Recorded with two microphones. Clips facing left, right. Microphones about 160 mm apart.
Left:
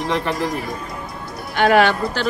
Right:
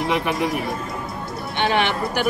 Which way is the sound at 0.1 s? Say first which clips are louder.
Left 1 dB; 15° right (ahead or behind).